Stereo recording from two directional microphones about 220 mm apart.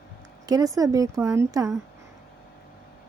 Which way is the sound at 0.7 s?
15° right (ahead or behind).